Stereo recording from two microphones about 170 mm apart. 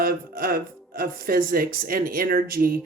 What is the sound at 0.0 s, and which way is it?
Speech, 60° right (ahead or behind).